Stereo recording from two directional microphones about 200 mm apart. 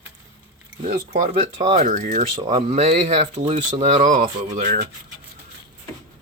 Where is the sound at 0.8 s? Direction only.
40° right (ahead or behind).